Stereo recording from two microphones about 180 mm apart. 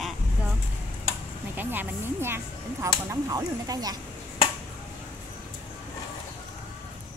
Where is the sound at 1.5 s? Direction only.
10° right (ahead or behind).